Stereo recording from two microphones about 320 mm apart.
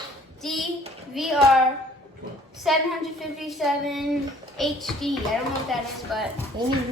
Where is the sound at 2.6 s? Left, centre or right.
Centre.